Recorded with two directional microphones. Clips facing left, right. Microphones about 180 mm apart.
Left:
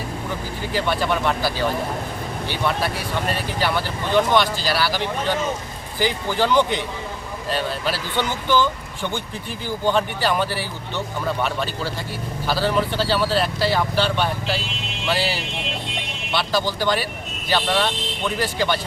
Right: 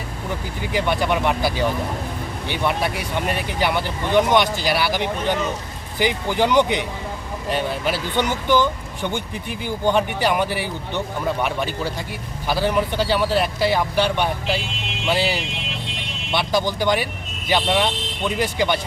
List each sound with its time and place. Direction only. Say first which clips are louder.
0.7 s speech: right 1 dB; 20° right (ahead or behind)